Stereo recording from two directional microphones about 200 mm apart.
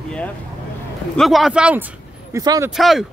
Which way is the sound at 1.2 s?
Centre (ahead or behind).